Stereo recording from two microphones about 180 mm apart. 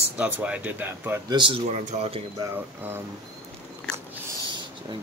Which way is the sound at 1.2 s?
25° right (ahead or behind).